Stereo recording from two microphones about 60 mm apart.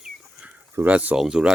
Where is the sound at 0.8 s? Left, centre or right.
Right.